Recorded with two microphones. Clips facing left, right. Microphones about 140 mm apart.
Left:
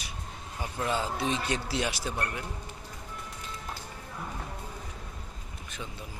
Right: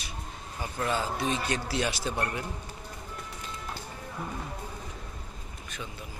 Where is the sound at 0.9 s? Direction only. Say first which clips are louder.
Even; 20° left (ahead or behind).